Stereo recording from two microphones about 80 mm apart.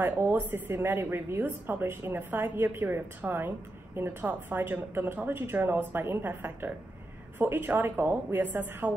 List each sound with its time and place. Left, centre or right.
0.0 s a woman's voice: right